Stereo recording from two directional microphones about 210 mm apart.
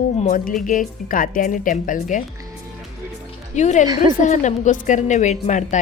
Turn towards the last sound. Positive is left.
turn(degrees=35)  # may be behind; listen again after turning